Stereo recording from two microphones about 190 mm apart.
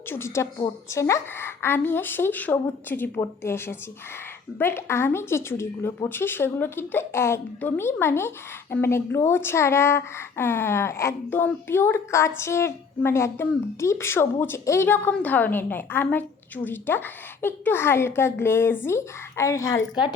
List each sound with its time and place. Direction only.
0.1 s a woman's voice: 15° left (ahead or behind)